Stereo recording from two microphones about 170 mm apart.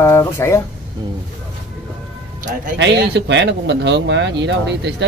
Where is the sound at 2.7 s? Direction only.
85° right.